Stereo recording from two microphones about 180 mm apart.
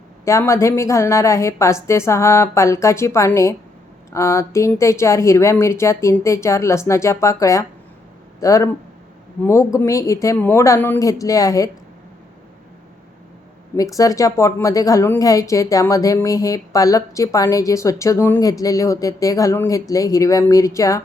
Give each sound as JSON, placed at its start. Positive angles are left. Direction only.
{"t": 0.3, "sound": "speech", "side_deg": 15}
{"t": 13.7, "sound": "a woman's voice", "side_deg": 20}